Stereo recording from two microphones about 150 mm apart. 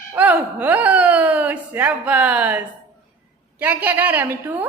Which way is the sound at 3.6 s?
10° right (ahead or behind).